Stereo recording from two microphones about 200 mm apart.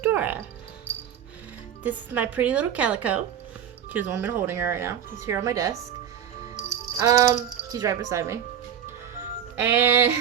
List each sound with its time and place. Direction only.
0.0 s speech: 10° right (ahead or behind)
1.8 s speech: 10° right (ahead or behind)
6.7 s music: 15° right (ahead or behind)
7.7 s speech: 15° right (ahead or behind)
9.6 s speech: 10° right (ahead or behind)